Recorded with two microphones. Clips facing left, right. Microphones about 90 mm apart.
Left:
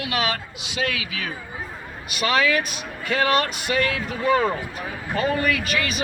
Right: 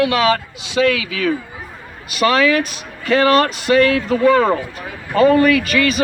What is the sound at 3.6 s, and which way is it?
Speech, 75° right (ahead or behind).